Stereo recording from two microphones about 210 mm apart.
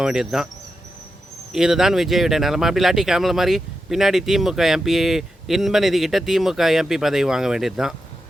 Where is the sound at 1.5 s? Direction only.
Centre (ahead or behind).